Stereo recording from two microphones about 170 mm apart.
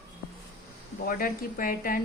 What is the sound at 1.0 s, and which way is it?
A woman's voice, 60° left (ahead or behind).